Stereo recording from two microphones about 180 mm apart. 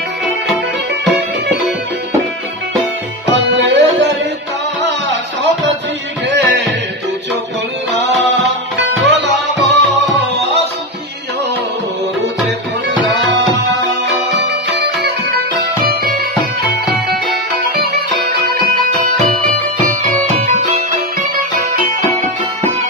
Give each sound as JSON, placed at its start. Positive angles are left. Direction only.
{"t": 3.3, "sound": "tabla", "side_deg": -80}
{"t": 6.3, "sound": "music", "side_deg": -75}
{"t": 9.0, "sound": "music", "side_deg": -80}
{"t": 13.1, "sound": "music", "side_deg": -85}
{"t": 15.9, "sound": "music", "side_deg": -55}
{"t": 20.0, "sound": "music", "side_deg": -45}